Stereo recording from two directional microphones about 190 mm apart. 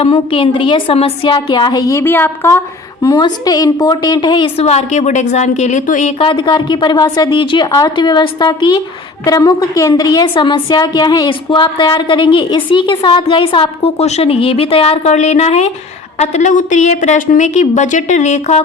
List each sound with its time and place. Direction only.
0.0 s a woman's voice: 30° left (ahead or behind)